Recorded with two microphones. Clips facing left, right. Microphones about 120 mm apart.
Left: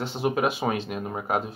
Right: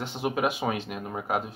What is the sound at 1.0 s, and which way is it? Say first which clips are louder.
Speech: left 2 dB; 20° left (ahead or behind).